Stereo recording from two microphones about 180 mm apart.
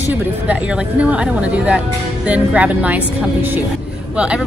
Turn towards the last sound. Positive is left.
turn(degrees=-5)  # may be behind; listen again after turning